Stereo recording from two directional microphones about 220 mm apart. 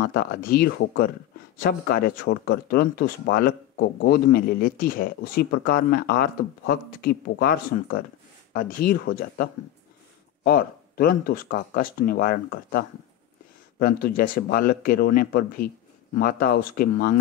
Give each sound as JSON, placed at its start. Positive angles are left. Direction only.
{"t": 0.0, "sound": "speech", "side_deg": 45}